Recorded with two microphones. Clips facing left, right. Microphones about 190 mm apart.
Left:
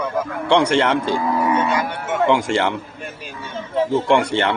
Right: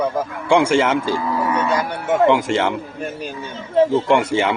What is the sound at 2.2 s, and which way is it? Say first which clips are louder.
Speech: right 1 dB; centre (ahead or behind).